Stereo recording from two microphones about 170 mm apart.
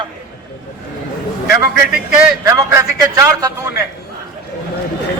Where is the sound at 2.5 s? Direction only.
20° right (ahead or behind).